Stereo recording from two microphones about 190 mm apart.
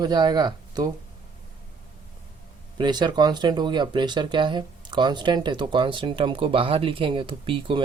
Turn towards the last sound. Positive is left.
turn(degrees=-25)  # may be behind; listen again after turning